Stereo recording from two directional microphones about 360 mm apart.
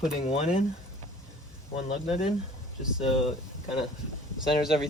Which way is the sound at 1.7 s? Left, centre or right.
Centre.